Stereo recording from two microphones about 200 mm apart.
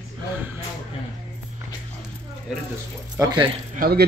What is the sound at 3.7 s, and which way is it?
Speech, 50° right (ahead or behind).